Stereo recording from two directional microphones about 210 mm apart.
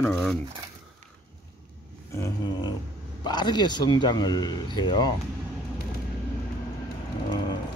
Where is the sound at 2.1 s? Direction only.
15° left (ahead or behind).